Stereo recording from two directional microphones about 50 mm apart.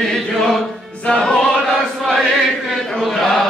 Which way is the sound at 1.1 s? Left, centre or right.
Centre.